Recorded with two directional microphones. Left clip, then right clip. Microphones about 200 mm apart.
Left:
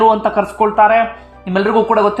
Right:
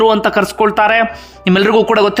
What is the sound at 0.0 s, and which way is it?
Speech, 20° right (ahead or behind).